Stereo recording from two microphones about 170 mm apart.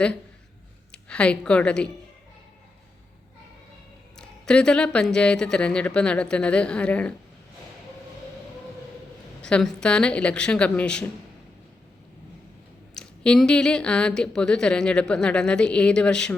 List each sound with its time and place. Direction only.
0.9 s a woman's voice: 5° left (ahead or behind)
4.2 s a woman's voice: 5° left (ahead or behind)
9.4 s a woman's voice: 5° left (ahead or behind)
12.9 s a woman's voice: 5° left (ahead or behind)